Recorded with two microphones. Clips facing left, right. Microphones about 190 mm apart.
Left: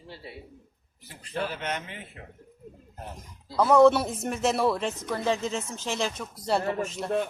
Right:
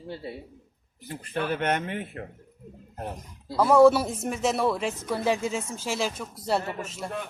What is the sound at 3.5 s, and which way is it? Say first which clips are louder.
Speech: right 1 dB; 5° right (ahead or behind).